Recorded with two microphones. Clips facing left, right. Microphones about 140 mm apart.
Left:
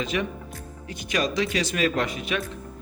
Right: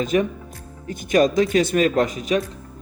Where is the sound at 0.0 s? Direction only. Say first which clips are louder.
Right 7 dB; 45° right (ahead or behind).